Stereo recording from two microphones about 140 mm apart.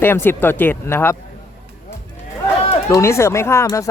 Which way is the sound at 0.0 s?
15° left (ahead or behind).